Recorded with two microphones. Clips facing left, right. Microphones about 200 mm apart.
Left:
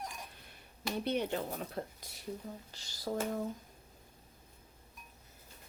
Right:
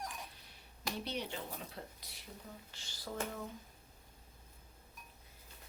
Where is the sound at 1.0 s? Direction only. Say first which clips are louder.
Left 8 dB; 55° left (ahead or behind).